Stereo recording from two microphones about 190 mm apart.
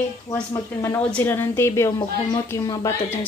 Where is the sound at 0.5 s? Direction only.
15° left (ahead or behind).